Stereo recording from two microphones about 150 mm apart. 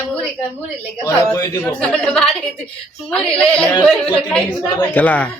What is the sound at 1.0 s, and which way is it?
Speech, 20° left (ahead or behind).